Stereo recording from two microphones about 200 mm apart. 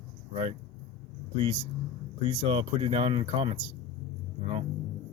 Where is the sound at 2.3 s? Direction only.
25° right (ahead or behind).